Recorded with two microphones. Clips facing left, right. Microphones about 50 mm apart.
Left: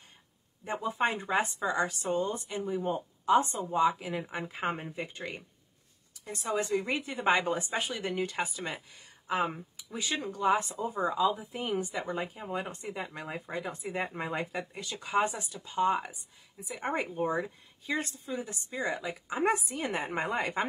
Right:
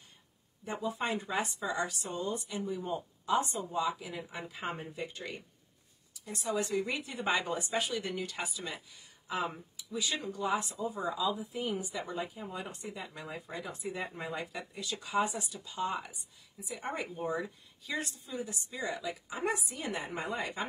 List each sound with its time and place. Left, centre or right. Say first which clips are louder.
0.7 s speech: left 4 dB; left